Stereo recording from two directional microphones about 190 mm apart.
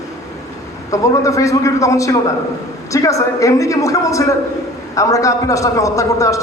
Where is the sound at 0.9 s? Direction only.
15° left (ahead or behind).